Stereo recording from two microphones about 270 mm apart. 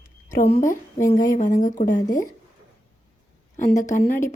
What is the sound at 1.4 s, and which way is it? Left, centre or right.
Speech, left.